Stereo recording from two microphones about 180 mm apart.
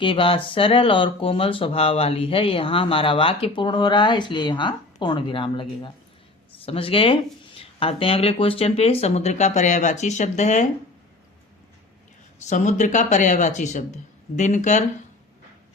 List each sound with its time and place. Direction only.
0.0 s speech: 30° left (ahead or behind)
12.5 s speech: 40° left (ahead or behind)